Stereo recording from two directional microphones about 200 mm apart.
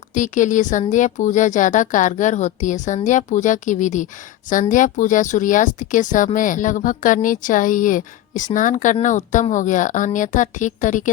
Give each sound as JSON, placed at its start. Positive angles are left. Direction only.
{"t": 0.1, "sound": "a woman's voice", "side_deg": 40}